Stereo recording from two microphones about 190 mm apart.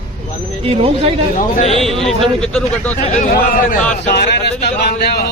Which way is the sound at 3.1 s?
35° left (ahead or behind).